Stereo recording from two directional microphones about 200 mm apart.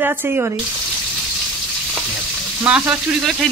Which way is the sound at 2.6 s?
5° right (ahead or behind).